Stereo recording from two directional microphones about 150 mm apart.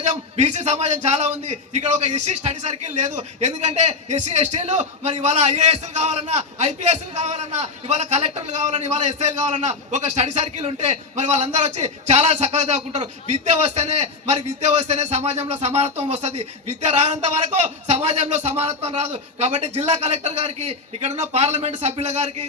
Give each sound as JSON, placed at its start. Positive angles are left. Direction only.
{"t": 0.0, "sound": "a man's voice", "side_deg": -50}